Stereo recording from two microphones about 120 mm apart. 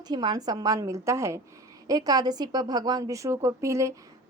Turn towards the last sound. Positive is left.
turn(degrees=-25)  # may be behind; listen again after turning